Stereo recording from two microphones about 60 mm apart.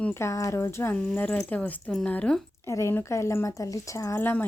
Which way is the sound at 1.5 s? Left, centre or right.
Left.